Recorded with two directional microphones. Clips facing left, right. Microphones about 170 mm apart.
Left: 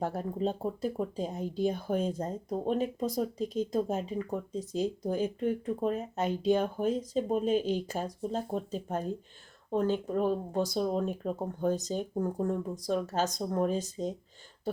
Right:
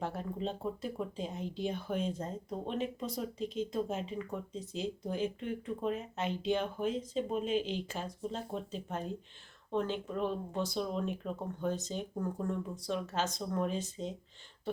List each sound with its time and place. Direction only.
0.0 s speech: 40° left (ahead or behind)